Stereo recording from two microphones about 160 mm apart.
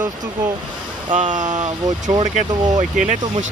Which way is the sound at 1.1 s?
50° right (ahead or behind).